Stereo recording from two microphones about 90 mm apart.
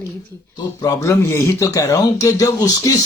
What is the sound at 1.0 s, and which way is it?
Speech, 30° left (ahead or behind).